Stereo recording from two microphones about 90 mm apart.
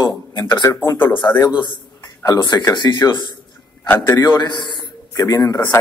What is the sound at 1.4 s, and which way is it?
A man's voice, 60° left (ahead or behind).